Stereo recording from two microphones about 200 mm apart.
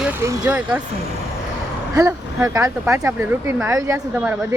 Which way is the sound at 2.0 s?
15° right (ahead or behind).